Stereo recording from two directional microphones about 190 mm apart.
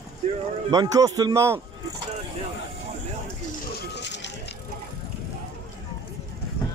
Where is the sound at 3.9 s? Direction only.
65° left (ahead or behind).